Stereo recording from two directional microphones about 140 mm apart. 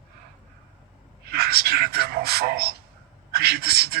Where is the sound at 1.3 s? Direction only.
90° right.